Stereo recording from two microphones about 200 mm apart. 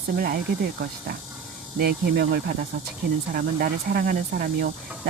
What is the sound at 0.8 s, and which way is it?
Speech, 60° right (ahead or behind).